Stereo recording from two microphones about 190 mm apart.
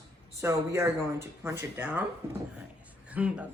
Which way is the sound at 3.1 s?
5° right (ahead or behind).